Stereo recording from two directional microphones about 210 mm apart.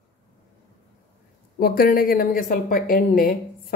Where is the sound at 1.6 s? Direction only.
45° left (ahead or behind).